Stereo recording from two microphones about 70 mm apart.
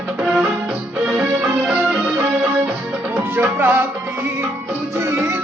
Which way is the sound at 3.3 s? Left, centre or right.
Right.